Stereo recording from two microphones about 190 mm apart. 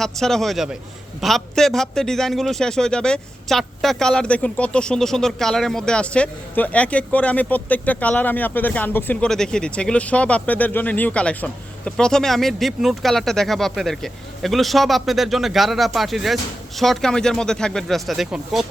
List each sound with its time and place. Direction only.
0.0 s a man's voice: centre (ahead or behind)